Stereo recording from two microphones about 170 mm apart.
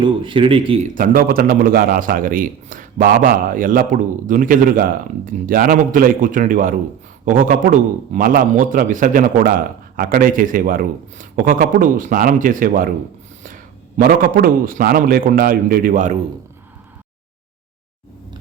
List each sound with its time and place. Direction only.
0.0 s speech: 30° right (ahead or behind)
0.8 s a man's voice: 55° right (ahead or behind)